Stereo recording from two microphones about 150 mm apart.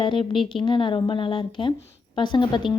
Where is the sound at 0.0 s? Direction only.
35° left (ahead or behind).